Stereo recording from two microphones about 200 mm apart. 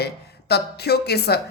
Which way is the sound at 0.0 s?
55° left (ahead or behind).